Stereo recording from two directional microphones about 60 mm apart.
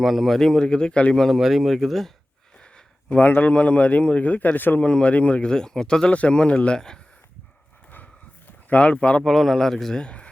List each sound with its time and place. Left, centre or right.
0.0 s speech: centre
1.1 s speech: centre
1.4 s speech: centre
3.1 s a man's voice: left
4.8 s speech: centre
8.7 s a man's voice: centre
9.2 s speech: centre